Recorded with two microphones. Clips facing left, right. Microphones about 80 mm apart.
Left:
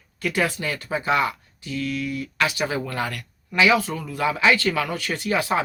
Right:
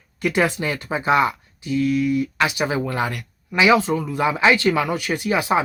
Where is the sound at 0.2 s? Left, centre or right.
Right.